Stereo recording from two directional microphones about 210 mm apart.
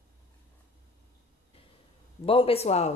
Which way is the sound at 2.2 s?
25° left (ahead or behind).